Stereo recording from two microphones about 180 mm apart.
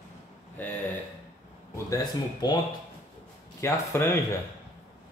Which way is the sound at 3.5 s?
15° left (ahead or behind).